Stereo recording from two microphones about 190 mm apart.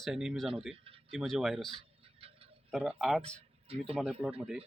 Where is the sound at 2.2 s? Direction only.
30° right (ahead or behind).